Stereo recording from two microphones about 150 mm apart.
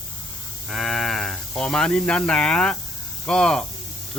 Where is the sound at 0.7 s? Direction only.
Centre (ahead or behind).